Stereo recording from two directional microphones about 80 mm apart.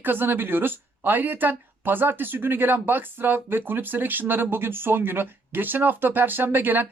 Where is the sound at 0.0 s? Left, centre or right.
Right.